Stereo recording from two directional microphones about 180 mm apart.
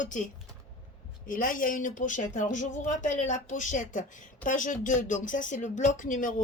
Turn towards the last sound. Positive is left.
turn(degrees=45)  # may be behind; listen again after turning